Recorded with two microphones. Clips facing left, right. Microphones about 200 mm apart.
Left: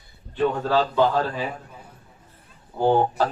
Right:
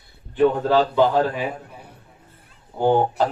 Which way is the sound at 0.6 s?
15° right (ahead or behind).